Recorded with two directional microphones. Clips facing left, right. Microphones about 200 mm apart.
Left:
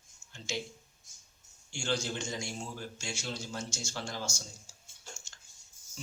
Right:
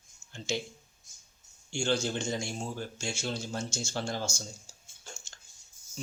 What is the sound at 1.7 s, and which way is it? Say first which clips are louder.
A man's voice: right 4 dB; 25° right (ahead or behind).